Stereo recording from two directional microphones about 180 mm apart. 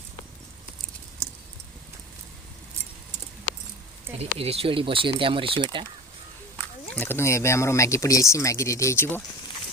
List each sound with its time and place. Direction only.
4.2 s speech: 35° right (ahead or behind)
6.9 s speech: 10° left (ahead or behind)